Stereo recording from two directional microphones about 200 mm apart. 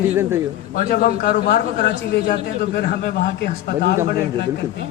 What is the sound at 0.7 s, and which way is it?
A man's voice, 45° left (ahead or behind).